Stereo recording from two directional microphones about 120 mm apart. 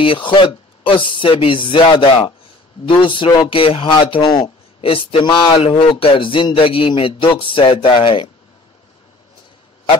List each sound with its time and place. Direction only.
0.0 s a man's voice: 45° left (ahead or behind)